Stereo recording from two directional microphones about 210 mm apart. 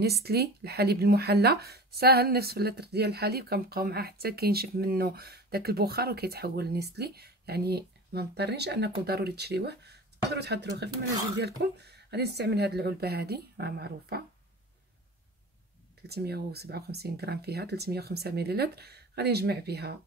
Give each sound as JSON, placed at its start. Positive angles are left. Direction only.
{"t": 0.0, "sound": "speech", "side_deg": -50}
{"t": 16.1, "sound": "speech", "side_deg": -50}